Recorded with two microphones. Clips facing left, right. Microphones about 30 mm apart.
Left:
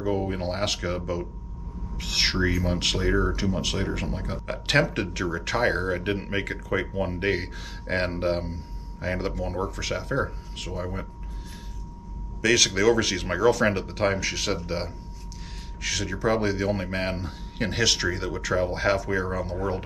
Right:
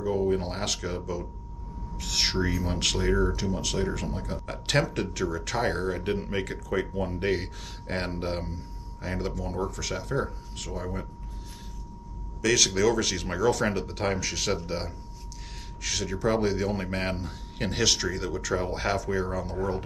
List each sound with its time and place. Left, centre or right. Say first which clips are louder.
0.0 s a man's voice: right 1 dB; left
7.2 s a man's voice: left 2 dB; centre
12.4 s a man's voice: left 2 dB; centre